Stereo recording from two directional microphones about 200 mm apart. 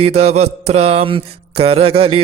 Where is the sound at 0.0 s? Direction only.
30° right (ahead or behind).